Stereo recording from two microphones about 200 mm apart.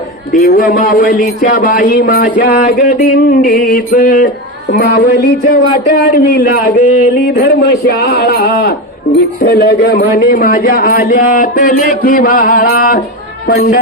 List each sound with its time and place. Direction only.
0.3 s speech: 45° left (ahead or behind)